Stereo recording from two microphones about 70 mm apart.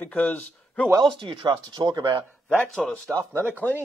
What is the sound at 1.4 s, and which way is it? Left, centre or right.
Speech, right.